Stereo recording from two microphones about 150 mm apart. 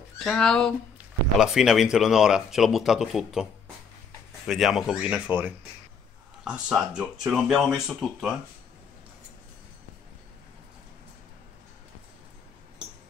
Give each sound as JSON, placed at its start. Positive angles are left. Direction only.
{"t": 0.2, "sound": "speech", "side_deg": 5}
{"t": 4.5, "sound": "speech", "side_deg": 0}